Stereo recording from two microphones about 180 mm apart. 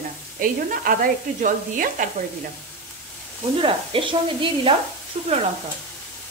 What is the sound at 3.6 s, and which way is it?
Speech, 30° right (ahead or behind).